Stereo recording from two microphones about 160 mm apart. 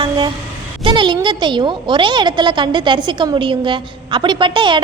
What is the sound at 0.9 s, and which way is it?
A woman's voice, 30° right (ahead or behind).